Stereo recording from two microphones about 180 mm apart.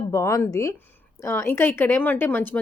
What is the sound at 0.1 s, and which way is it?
Speech, 15° left (ahead or behind).